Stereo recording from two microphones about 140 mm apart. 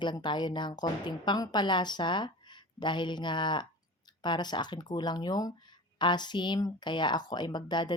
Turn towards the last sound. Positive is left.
turn(degrees=30)  # may be behind; listen again after turning